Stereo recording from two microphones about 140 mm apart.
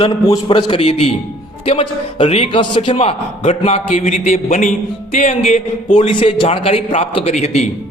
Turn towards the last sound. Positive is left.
turn(degrees=50)  # may be behind; listen again after turning